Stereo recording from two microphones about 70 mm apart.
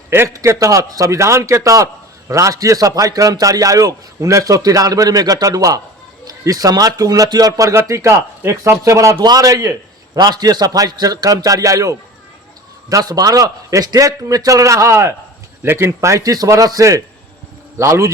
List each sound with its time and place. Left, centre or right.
0.3 s a man's voice: right
7.9 s a man's voice: right
8.8 s a man's voice: right
9.1 s a man's voice: right
10.2 s a man's voice: right
12.9 s a man's voice: right
16.0 s a man's voice: right
17.7 s a man's voice: right